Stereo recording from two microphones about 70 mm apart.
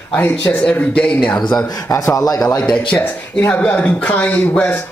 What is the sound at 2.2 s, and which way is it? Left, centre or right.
Speech, left.